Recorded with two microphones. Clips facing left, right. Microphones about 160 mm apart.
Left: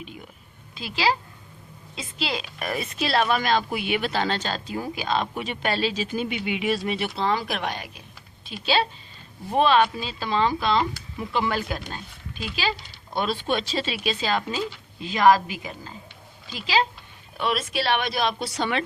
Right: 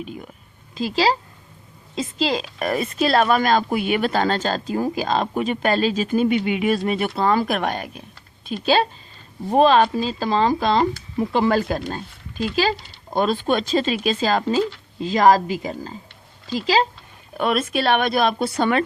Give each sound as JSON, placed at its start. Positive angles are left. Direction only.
{"t": 0.8, "sound": "a woman's voice", "side_deg": -35}
{"t": 17.3, "sound": "a woman's voice", "side_deg": -50}